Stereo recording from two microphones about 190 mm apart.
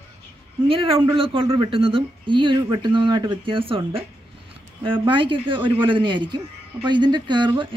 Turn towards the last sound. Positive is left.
turn(degrees=-25)  # may be behind; listen again after turning